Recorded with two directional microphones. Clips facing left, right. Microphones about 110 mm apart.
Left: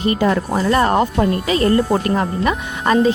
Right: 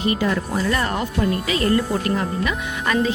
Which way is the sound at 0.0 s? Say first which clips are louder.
Left 4 dB; 40° left (ahead or behind).